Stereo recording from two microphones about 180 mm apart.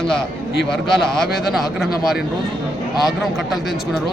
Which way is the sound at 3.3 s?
Centre (ahead or behind).